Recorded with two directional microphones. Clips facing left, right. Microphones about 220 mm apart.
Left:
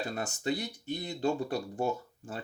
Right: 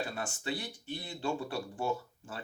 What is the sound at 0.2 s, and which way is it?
Speech, 40° left (ahead or behind).